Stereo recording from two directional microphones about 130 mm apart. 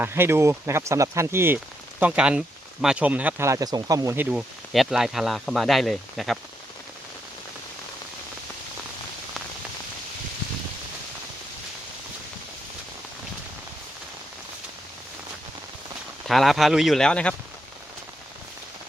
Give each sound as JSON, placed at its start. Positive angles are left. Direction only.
{"t": 0.0, "sound": "speech", "side_deg": -15}
{"t": 2.0, "sound": "speech", "side_deg": -10}
{"t": 3.4, "sound": "speech", "side_deg": -25}
{"t": 16.2, "sound": "speech", "side_deg": 0}